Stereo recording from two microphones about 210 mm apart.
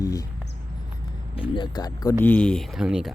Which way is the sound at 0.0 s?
15° left (ahead or behind).